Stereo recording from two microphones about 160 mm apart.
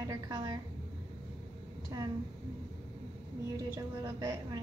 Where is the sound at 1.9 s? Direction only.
25° right (ahead or behind).